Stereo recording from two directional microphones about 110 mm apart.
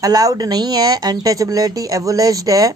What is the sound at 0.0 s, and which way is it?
Speech, 35° right (ahead or behind).